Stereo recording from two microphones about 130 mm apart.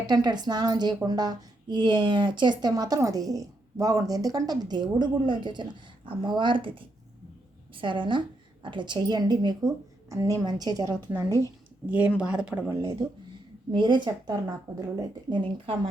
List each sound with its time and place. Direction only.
0.1 s a woman's voice: 35° right (ahead or behind)
11.9 s speech: 10° right (ahead or behind)
12.6 s speech: 25° right (ahead or behind)
13.7 s a woman's voice: 40° right (ahead or behind)